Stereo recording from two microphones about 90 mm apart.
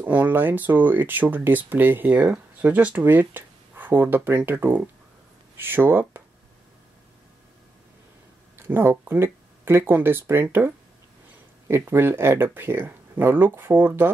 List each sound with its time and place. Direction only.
0.0 s speech: 20° right (ahead or behind)
8.6 s speech: 25° right (ahead or behind)